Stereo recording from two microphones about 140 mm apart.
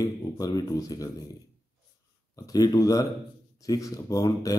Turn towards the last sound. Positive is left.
turn(degrees=25)  # may be behind; listen again after turning